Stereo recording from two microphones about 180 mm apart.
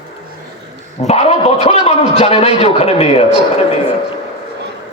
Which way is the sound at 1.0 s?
35° left (ahead or behind).